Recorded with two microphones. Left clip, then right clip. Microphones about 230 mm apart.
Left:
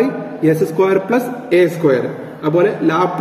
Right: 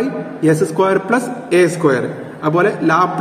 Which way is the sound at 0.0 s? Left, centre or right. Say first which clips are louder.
Left 1 dB; centre.